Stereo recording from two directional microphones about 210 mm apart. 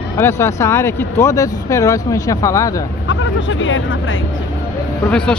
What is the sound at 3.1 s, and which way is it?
Speech, 65° left (ahead or behind).